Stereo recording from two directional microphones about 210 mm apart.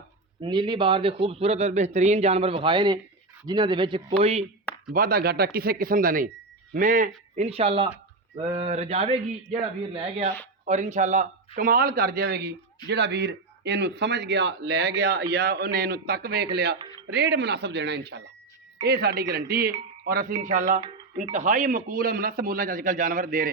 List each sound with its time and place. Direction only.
0.4 s a man's voice: 20° right (ahead or behind)
4.9 s a man's voice: 45° right (ahead or behind)